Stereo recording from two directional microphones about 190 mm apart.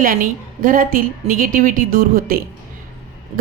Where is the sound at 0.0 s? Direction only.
45° right (ahead or behind).